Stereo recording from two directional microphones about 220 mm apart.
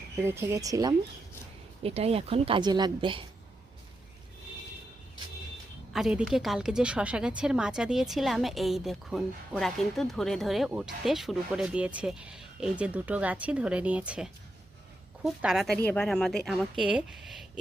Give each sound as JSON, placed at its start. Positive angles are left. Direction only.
{"t": 0.2, "sound": "speech", "side_deg": -10}
{"t": 1.8, "sound": "speech", "side_deg": -25}
{"t": 5.9, "sound": "a woman's voice", "side_deg": -5}